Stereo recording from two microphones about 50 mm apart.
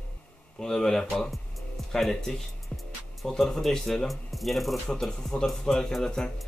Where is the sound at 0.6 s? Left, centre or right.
Centre.